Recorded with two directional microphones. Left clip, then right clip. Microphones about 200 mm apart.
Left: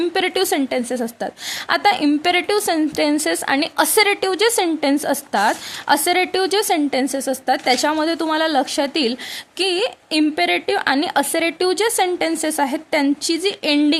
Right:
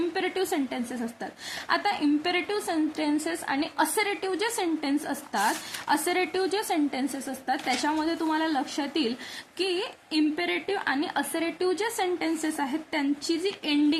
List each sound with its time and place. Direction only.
0.1 s a woman's voice: 50° left (ahead or behind)